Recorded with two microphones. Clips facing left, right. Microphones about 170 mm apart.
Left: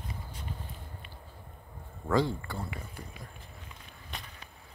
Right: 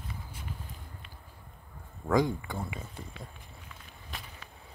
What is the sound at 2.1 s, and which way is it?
Speech, 15° right (ahead or behind).